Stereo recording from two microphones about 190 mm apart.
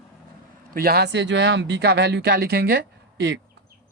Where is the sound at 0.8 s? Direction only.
55° right (ahead or behind).